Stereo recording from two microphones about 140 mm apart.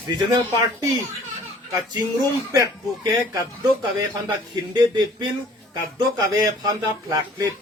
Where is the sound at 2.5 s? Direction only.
25° right (ahead or behind).